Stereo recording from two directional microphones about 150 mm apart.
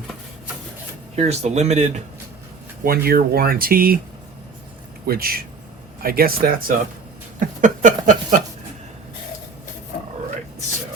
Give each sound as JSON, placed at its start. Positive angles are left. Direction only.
{"t": 1.1, "sound": "speech", "side_deg": -45}
{"t": 2.8, "sound": "speech", "side_deg": -85}
{"t": 5.0, "sound": "speech", "side_deg": -80}
{"t": 7.3, "sound": "speech", "side_deg": -60}